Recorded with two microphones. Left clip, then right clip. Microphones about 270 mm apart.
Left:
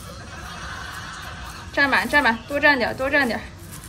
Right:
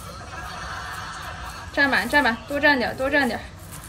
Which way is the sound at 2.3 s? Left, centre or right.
Centre.